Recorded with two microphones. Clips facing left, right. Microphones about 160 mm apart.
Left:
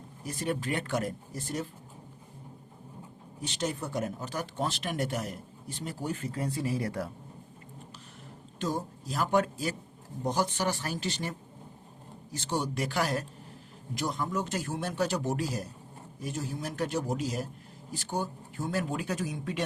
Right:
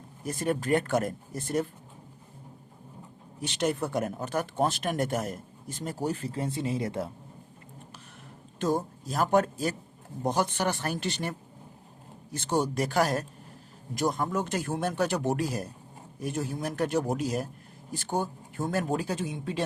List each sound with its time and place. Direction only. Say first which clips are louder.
0.3 s speech: right 5 dB; 50° right (ahead or behind)
3.4 s speech: right 5 dB; 65° right (ahead or behind); by 7.1 s 20° right (ahead or behind)
8.5 s speech: right 5 dB; 50° right (ahead or behind)
10.2 s a man's voice: right 2 dB; 60° right (ahead or behind); by 19.6 s 30° right (ahead or behind)